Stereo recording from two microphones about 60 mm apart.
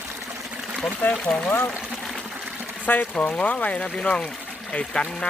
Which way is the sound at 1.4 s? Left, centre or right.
Left.